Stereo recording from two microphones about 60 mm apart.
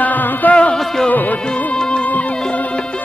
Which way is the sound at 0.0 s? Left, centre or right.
Left.